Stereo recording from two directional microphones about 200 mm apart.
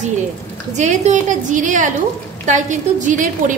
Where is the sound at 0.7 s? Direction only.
35° right (ahead or behind).